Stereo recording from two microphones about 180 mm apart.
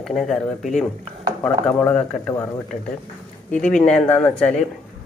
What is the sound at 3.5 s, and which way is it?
Speech, 5° left (ahead or behind).